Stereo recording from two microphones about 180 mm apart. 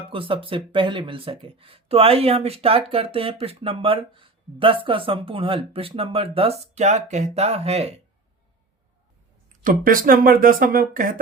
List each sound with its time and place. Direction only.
0.1 s speech: 30° right (ahead or behind)
9.6 s speech: 50° right (ahead or behind)